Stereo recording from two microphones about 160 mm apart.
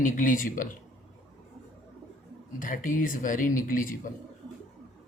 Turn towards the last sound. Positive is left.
turn(degrees=60)  # may be behind; listen again after turning